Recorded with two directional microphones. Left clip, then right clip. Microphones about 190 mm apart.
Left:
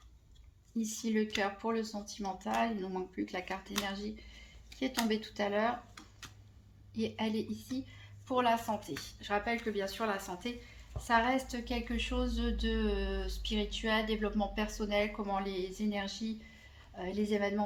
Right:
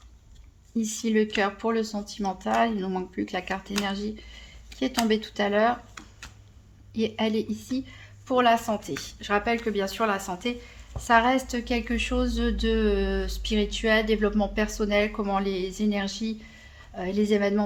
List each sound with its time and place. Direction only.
0.8 s a woman's voice: 40° right (ahead or behind)
6.9 s a woman's voice: 35° right (ahead or behind)